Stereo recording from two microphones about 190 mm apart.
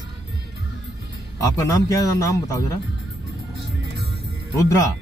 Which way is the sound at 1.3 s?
15° left (ahead or behind).